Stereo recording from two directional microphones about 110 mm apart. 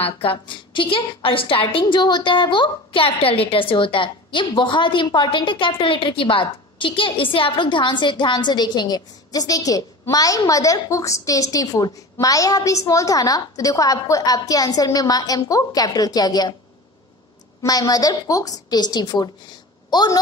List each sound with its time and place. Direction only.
0.0 s a woman's voice: 55° left (ahead or behind); by 16.5 s 35° left (ahead or behind)
17.6 s a woman's voice: 35° left (ahead or behind)